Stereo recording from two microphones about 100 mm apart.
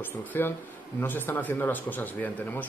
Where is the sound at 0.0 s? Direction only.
20° left (ahead or behind).